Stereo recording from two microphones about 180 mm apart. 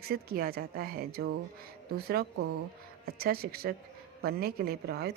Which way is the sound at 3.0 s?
60° right (ahead or behind).